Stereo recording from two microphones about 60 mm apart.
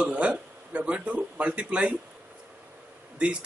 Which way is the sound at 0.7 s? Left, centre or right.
Right.